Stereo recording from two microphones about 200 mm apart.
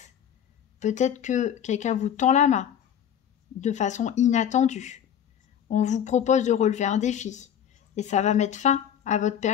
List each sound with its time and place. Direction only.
0.7 s speech: 35° left (ahead or behind)